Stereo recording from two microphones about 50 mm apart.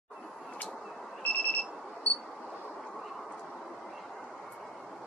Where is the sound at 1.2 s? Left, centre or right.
Left.